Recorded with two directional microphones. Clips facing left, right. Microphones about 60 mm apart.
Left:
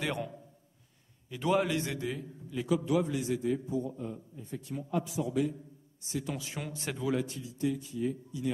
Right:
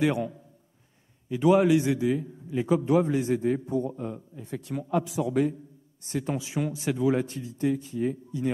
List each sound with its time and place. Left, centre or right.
0.0 s a man's voice: centre
1.3 s a man's voice: centre
2.5 s a man's voice: right
6.3 s a man's voice: centre
7.2 s a man's voice: right